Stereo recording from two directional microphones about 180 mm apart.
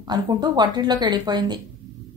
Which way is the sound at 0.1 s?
25° right (ahead or behind).